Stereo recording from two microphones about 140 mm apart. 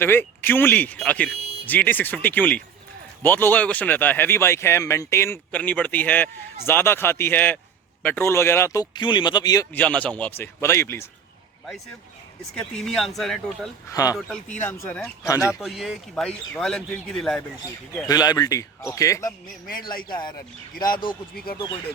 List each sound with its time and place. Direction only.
0.0 s speech: 15° left (ahead or behind)
9.7 s speech: 10° left (ahead or behind)
12.5 s speech: 5° left (ahead or behind)
13.9 s speech: 25° left (ahead or behind)
14.2 s speech: centre (ahead or behind); by 15.5 s 20° left (ahead or behind)
15.5 s speech: centre (ahead or behind)
18.1 s speech: 30° left (ahead or behind)
20.8 s speech: 90° left